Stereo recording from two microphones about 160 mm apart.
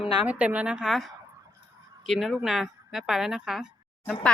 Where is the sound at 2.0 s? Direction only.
Centre (ahead or behind).